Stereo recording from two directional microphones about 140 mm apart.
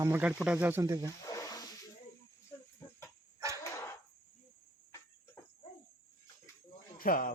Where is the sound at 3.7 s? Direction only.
20° left (ahead or behind).